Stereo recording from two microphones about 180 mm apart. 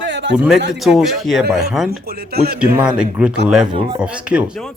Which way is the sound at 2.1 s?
60° right (ahead or behind).